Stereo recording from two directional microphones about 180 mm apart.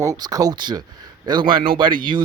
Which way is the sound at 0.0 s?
20° right (ahead or behind).